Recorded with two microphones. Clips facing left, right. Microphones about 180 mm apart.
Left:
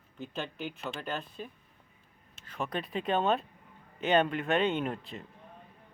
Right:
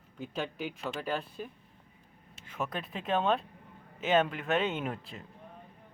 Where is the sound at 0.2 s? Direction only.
10° right (ahead or behind).